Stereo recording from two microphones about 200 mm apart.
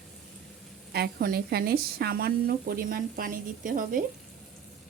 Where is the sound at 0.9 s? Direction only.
50° right (ahead or behind).